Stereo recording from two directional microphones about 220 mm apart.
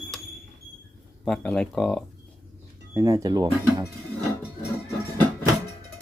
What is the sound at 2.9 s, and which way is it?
Speech, 15° right (ahead or behind).